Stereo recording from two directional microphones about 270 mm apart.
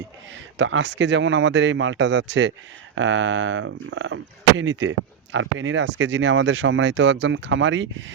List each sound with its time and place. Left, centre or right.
0.6 s speech: right